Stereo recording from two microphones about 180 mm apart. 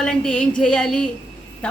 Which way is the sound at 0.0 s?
5° left (ahead or behind).